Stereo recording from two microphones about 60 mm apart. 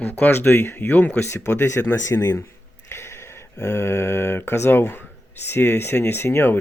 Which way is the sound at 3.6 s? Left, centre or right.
Left.